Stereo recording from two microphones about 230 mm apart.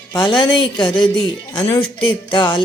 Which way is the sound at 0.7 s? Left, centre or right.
Centre.